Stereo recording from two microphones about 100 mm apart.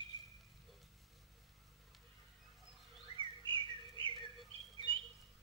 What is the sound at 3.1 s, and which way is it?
Whistling, 55° right (ahead or behind).